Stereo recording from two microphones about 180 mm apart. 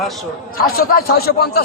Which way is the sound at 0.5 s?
55° left (ahead or behind).